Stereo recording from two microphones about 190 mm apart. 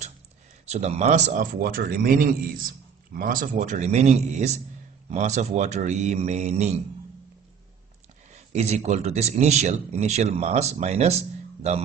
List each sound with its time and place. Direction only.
0.7 s speech: 35° right (ahead or behind)
8.5 s speech: 35° right (ahead or behind)